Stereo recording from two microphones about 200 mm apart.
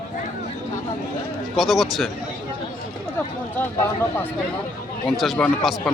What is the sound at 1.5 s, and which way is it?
Speech, centre (ahead or behind).